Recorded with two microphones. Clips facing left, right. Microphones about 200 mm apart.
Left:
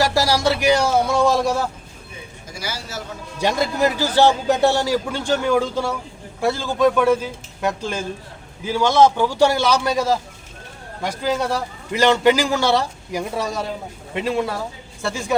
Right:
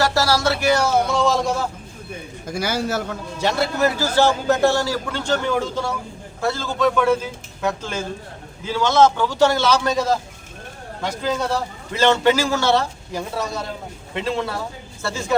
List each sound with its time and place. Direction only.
0.0 s a man's voice: 15° left (ahead or behind)
2.5 s a man's voice: 55° right (ahead or behind)
3.3 s a man's voice: 15° left (ahead or behind)